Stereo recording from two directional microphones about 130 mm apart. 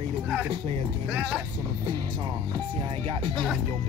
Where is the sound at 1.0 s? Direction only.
10° right (ahead or behind).